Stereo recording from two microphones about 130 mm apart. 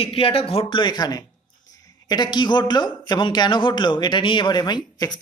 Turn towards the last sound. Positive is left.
turn(degrees=35)  # may be behind; listen again after turning